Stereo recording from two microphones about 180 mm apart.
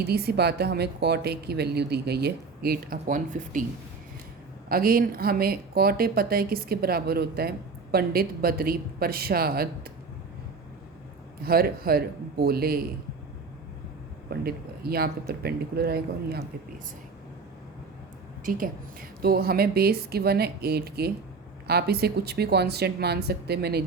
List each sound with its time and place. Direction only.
0.0 s speech: 60° right (ahead or behind)
4.7 s speech: 55° right (ahead or behind)
11.4 s speech: 60° right (ahead or behind)
14.3 s speech: 60° right (ahead or behind)
18.4 s a woman's voice: 50° right (ahead or behind)